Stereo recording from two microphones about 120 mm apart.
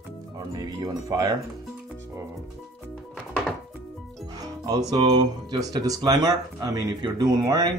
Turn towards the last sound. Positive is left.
turn(degrees=-35)  # may be behind; listen again after turning